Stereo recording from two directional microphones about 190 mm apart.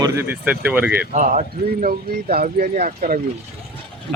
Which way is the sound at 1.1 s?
45° right (ahead or behind).